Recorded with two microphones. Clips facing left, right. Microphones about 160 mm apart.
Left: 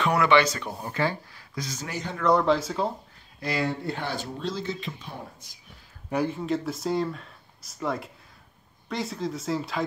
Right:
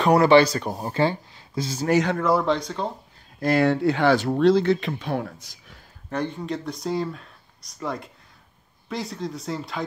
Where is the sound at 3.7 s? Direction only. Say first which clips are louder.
Right 12 dB; 85° right.